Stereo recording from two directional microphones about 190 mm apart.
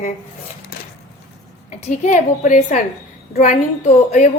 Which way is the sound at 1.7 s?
40° left (ahead or behind).